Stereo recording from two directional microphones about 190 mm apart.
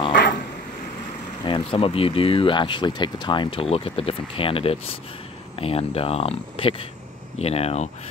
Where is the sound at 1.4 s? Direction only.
25° left (ahead or behind).